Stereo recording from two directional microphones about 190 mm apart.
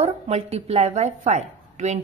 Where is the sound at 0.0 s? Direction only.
35° right (ahead or behind).